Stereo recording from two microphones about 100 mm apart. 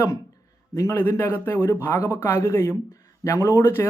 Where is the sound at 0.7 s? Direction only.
25° left (ahead or behind).